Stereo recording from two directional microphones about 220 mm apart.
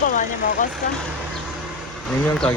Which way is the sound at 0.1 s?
35° left (ahead or behind).